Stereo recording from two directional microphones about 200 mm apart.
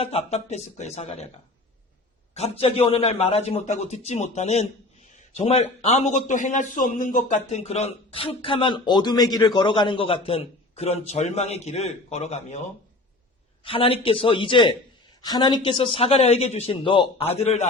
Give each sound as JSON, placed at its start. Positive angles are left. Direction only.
{"t": 0.0, "sound": "a man's voice", "side_deg": 30}
{"t": 2.3, "sound": "a man's voice", "side_deg": 30}
{"t": 13.7, "sound": "a man's voice", "side_deg": 25}